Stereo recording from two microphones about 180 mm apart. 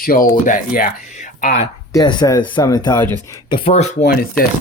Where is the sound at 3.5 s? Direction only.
35° left (ahead or behind).